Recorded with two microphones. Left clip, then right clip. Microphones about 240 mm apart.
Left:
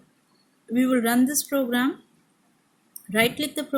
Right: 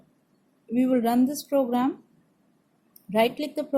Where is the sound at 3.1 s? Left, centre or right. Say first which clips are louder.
Left 1 dB; left.